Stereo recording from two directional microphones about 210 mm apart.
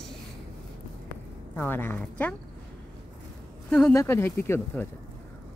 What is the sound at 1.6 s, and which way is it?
Speech, 10° left (ahead or behind).